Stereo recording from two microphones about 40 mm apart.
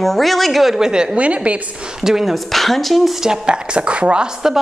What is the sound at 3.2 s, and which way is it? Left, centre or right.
Speech, centre.